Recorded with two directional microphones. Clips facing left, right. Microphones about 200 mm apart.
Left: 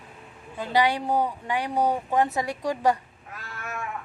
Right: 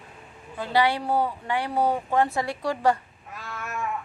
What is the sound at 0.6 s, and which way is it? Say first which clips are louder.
A woman's voice: even; 15° left (ahead or behind).